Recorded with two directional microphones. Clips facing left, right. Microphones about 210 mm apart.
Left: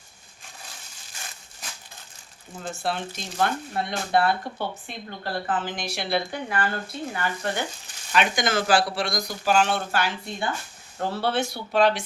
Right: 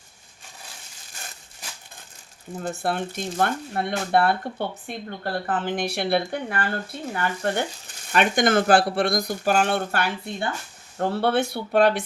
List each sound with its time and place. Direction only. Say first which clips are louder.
2.7 s speech: right 1 dB; 55° right (ahead or behind)